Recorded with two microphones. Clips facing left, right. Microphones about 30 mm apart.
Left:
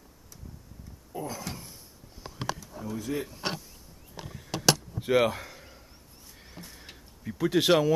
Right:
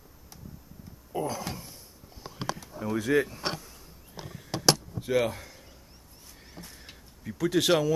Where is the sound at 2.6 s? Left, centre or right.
Right.